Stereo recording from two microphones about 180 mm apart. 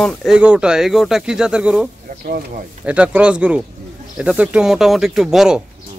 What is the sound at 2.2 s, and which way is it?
Speech, 55° right (ahead or behind).